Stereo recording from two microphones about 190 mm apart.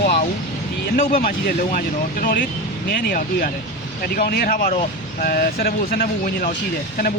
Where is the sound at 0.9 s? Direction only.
45° left (ahead or behind).